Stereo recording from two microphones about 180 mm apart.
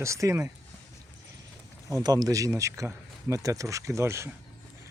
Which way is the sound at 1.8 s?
20° right (ahead or behind).